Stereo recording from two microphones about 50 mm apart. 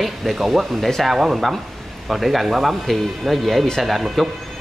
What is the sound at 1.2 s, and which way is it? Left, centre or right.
Speech, centre.